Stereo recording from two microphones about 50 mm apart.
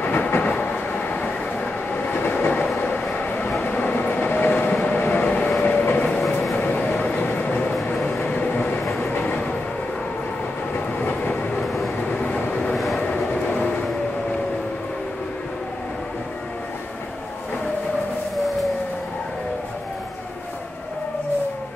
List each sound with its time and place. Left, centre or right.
0.0 s train: left
0.4 s train: left
2.8 s bow-wow: left
3.6 s train: left
5.0 s vehicle: left
5.6 s train: left
11.0 s train: left
11.6 s vehicle: centre
12.1 s train: left
12.7 s vehicle: centre
13.3 s vehicle: left